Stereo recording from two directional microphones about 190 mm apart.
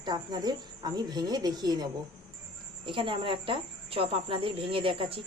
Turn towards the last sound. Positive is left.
turn(degrees=-30)  # may be behind; listen again after turning